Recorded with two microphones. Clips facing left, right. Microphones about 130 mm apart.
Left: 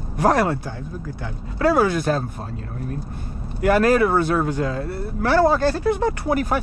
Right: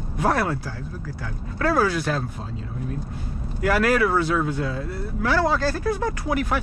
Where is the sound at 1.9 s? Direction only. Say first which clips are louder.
Left 4 dB; 40° left (ahead or behind).